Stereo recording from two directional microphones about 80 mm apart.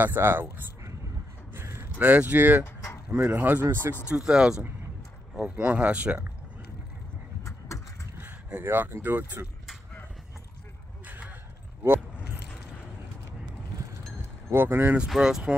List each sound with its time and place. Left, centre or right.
0.0 s speech: right
1.5 s a sound: right
2.0 s speech: right
2.6 s a sound: left
3.1 s speech: centre
4.1 s speech: centre
7.4 s vehicle: left
8.2 s speech: right
11.1 s a sound: centre
11.8 s keys jangling: right
14.5 s speech: right
15.0 s speech: centre